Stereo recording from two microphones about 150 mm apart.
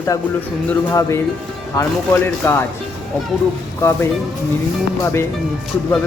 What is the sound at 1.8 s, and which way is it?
Speech, 15° left (ahead or behind).